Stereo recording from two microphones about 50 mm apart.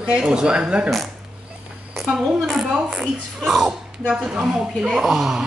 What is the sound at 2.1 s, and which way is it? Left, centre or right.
Speech, centre.